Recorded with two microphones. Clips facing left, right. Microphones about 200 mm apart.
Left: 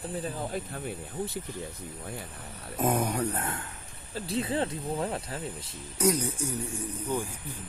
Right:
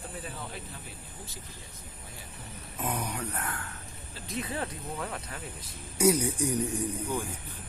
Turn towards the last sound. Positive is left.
turn(degrees=-15)  # may be behind; listen again after turning